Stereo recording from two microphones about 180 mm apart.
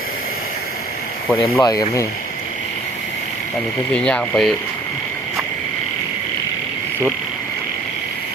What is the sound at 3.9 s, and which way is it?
Speech, 5° left (ahead or behind).